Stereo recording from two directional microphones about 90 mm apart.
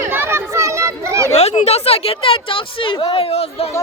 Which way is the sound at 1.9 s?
90° left.